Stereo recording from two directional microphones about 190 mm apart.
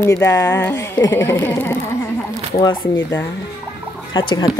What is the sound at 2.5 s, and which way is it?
Speech, 25° left (ahead or behind).